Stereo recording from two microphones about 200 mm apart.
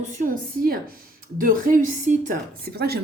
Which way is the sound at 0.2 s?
45° right (ahead or behind).